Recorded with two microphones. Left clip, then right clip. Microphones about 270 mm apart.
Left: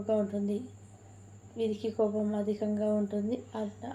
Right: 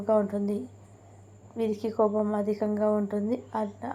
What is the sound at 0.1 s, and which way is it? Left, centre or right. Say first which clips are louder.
A woman's voice: right 5 dB; right.